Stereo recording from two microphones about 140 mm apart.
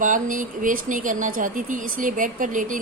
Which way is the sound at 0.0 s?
70° right (ahead or behind).